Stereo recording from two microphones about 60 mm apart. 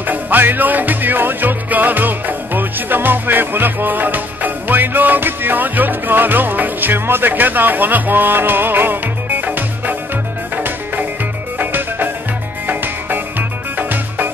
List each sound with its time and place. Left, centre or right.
0.0 s music: right